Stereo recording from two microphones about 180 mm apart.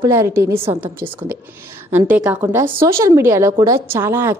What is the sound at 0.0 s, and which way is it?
Speech, 15° right (ahead or behind).